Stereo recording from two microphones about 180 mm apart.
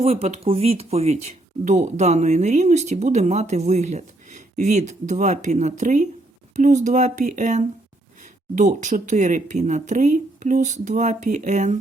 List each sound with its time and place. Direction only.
0.0 s speech: 35° right (ahead or behind)